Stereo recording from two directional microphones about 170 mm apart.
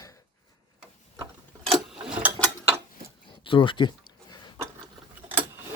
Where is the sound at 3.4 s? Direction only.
30° left (ahead or behind).